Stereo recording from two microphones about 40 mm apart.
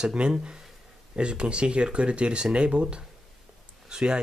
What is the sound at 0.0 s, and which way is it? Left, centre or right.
Speech, right.